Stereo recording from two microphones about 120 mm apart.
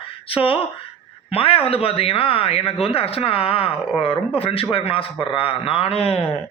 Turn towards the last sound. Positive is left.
turn(degrees=55)  # may be behind; listen again after turning